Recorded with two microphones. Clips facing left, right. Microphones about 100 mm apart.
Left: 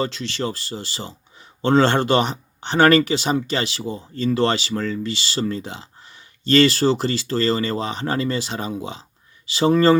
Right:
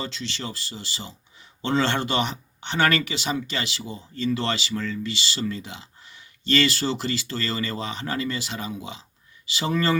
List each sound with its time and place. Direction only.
0.0 s speech: 45° left (ahead or behind)